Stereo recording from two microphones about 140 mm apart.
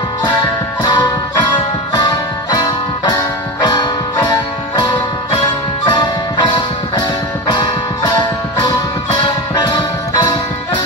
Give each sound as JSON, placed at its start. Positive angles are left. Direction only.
{"t": 0.8, "sound": "music", "side_deg": 30}